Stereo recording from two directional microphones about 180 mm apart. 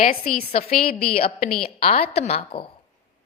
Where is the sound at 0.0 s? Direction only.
55° left (ahead or behind).